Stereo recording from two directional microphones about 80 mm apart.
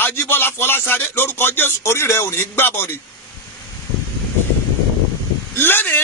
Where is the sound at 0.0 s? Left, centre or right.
Left.